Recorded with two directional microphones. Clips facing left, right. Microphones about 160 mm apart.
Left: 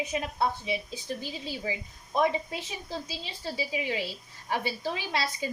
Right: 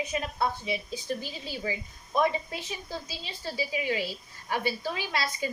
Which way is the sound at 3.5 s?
25° left (ahead or behind).